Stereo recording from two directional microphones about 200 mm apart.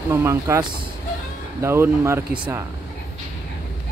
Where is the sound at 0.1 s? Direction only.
15° right (ahead or behind).